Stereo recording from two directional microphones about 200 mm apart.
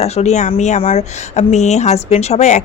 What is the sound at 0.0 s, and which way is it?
Speech, 35° left (ahead or behind).